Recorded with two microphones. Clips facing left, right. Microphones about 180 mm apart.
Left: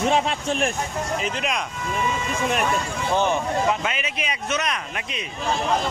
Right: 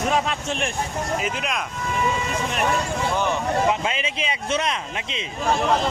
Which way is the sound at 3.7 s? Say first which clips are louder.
Right 1 dB; 25° right (ahead or behind).